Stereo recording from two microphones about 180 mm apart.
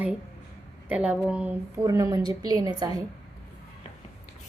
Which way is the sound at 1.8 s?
20° right (ahead or behind).